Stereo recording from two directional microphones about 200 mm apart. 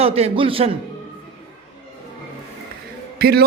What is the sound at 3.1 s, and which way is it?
Speech, 50° right (ahead or behind).